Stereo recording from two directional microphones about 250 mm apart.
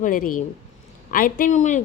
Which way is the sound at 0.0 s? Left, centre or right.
Left.